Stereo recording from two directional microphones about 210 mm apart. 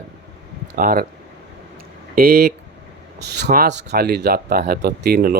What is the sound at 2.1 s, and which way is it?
Speech, 45° right (ahead or behind).